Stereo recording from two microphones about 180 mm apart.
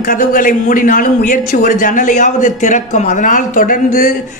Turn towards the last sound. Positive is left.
turn(degrees=50)  # may be behind; listen again after turning